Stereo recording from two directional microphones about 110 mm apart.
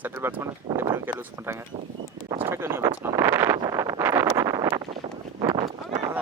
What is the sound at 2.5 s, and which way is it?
Speech, 25° right (ahead or behind).